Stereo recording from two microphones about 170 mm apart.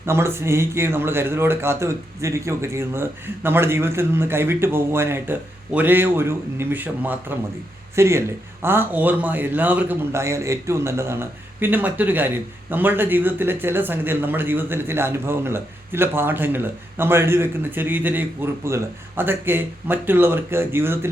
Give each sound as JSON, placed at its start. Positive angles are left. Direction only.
{"t": 0.0, "sound": "a man's voice", "side_deg": -15}